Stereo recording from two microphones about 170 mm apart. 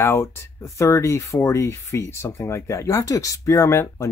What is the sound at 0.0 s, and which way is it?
Speech, 15° left (ahead or behind).